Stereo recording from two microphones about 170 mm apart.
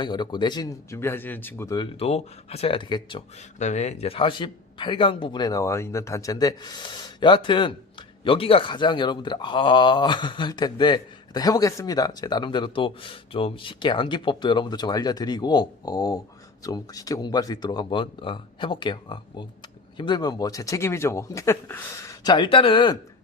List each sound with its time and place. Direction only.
0.0 s speech: 25° left (ahead or behind)
2.0 s speech: 35° left (ahead or behind)
3.6 s speech: 45° left (ahead or behind)